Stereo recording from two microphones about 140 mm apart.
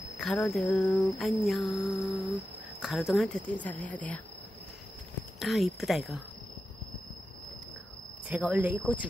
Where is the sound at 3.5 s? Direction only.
10° left (ahead or behind).